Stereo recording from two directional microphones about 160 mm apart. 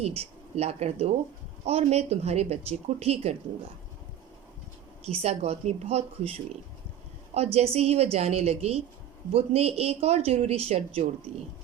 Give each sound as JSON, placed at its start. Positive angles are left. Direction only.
{"t": 0.0, "sound": "speech", "side_deg": -40}
{"t": 5.2, "sound": "speech", "side_deg": -40}
{"t": 7.3, "sound": "speech", "side_deg": -40}